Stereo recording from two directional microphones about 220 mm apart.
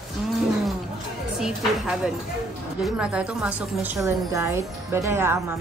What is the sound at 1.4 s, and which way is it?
A woman's voice, 5° right (ahead or behind).